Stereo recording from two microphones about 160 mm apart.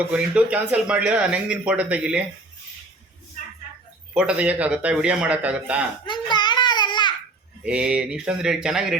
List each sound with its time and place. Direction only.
0.0 s speech: 5° right (ahead or behind)
4.1 s speech: 5° right (ahead or behind)
6.1 s babbling: 25° left (ahead or behind)
7.6 s speech: 5° right (ahead or behind)